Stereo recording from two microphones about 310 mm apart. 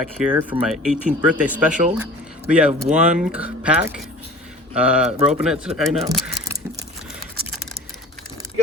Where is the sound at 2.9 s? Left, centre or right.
Centre.